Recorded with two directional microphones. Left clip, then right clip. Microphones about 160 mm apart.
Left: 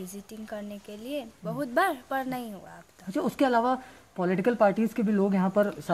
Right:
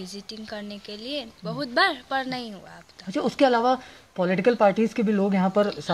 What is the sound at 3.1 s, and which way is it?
A woman's voice, 45° right (ahead or behind).